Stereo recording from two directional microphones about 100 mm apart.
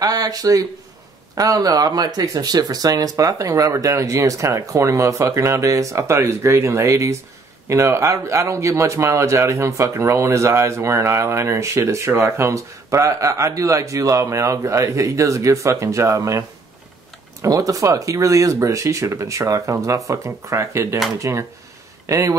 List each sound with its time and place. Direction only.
0.0 s speech: 40° right (ahead or behind)